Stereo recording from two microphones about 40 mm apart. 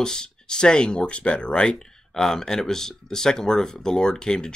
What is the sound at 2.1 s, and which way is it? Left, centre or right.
Speech, centre.